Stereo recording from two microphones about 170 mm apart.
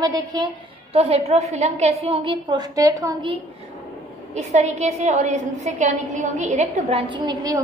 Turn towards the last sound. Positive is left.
turn(degrees=-25)  # may be behind; listen again after turning